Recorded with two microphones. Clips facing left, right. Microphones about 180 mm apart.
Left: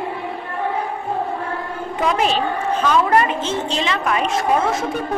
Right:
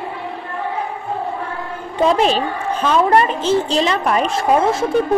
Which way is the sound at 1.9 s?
30° right (ahead or behind).